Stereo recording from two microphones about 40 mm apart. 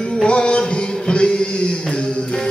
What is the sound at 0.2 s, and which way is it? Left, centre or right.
Music, left.